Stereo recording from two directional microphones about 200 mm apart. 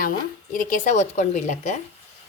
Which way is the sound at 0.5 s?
40° left (ahead or behind).